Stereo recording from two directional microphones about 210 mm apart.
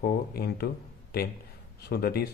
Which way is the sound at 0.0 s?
45° left (ahead or behind).